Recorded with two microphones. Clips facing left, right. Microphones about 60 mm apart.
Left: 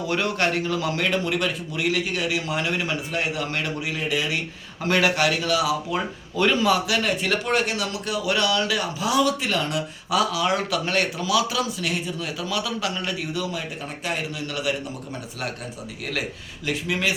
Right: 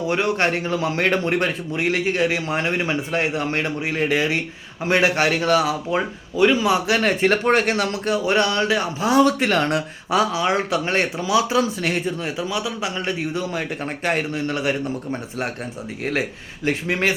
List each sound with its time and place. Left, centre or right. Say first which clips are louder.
0.1 s a man's voice: right 3 dB; right
1.0 s a man's voice: right 5 dB; right
4.8 s a man's voice: right 2 dB; right
6.3 s a man's voice: right 3 dB; centre
6.8 s a man's voice: right 5 dB; right
10.1 s a man's voice: right 3 dB; right
12.4 s a man's voice: right 2 dB; right
16.6 s a man's voice: right 4 dB; right